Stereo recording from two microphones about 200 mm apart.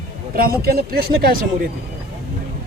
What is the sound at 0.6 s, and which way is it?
Speech, 50° right (ahead or behind).